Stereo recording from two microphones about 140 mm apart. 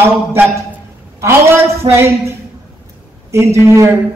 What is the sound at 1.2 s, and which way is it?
A man's voice, 20° right (ahead or behind).